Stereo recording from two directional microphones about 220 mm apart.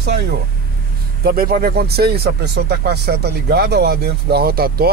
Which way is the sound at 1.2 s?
45° right (ahead or behind).